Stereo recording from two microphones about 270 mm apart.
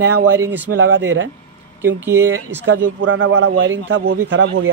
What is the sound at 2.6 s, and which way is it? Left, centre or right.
A man's voice, right.